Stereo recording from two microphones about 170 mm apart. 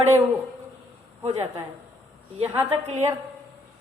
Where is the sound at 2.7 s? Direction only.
40° right (ahead or behind).